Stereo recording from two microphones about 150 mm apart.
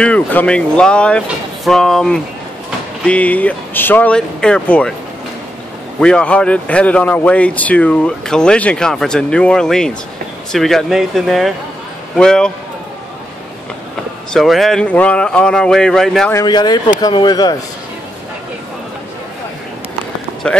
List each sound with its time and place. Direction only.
0.0 s speech: 10° left (ahead or behind)
5.9 s speech: 5° left (ahead or behind)
14.3 s speech: centre (ahead or behind)
16.4 s speech: 30° left (ahead or behind)